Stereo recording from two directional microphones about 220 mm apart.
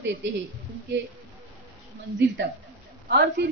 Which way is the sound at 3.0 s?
50° right (ahead or behind).